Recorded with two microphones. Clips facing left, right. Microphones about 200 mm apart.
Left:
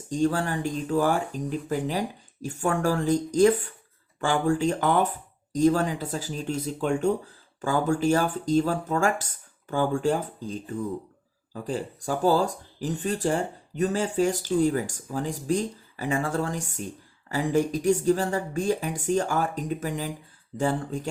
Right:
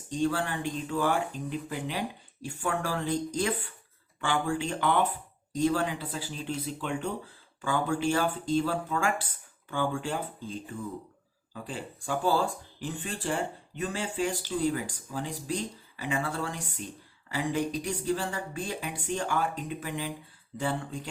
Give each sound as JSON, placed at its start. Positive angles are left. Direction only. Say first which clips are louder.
{"t": 0.1, "sound": "speech", "louder": "left 4 dB", "side_deg": 40}